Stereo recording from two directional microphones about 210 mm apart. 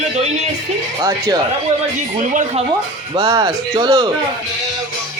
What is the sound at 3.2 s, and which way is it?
Speech, 20° right (ahead or behind).